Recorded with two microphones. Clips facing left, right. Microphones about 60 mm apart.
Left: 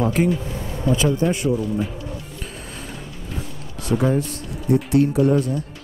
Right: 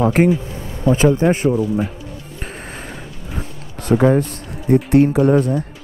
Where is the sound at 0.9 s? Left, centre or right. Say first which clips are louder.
Right 6 dB; right.